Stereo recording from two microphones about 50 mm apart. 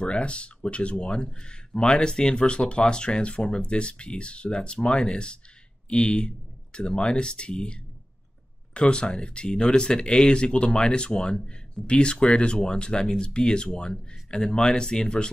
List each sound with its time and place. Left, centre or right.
0.0 s a man's voice: left